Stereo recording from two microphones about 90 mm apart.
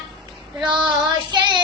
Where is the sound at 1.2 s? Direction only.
55° right (ahead or behind).